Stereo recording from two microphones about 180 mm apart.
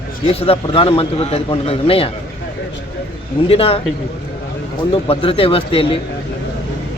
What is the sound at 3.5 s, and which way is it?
Speech, 35° left (ahead or behind).